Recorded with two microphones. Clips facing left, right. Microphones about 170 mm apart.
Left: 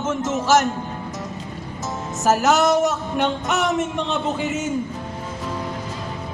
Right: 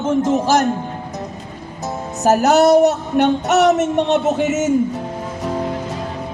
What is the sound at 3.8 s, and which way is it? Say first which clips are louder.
Speech: right 7 dB; 70° right (ahead or behind).